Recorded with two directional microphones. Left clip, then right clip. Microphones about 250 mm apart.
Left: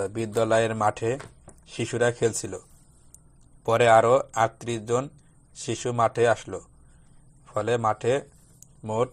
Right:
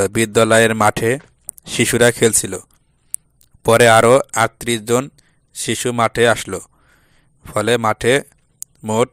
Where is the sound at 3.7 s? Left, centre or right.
Right.